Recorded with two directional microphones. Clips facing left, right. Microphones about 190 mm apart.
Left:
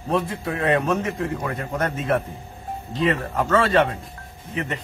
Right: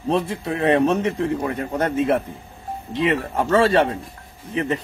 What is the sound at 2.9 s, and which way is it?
A man's voice, 25° right (ahead or behind).